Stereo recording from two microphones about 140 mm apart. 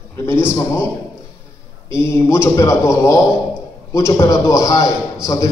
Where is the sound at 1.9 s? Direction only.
20° left (ahead or behind).